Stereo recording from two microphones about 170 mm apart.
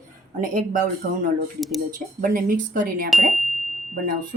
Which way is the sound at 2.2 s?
55° right (ahead or behind).